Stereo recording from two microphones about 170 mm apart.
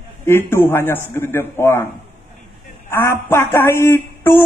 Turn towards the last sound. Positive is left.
turn(degrees=15)  # may be behind; listen again after turning